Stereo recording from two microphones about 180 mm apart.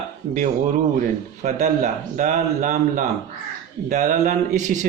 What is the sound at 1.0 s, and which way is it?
Speech, 50° right (ahead or behind).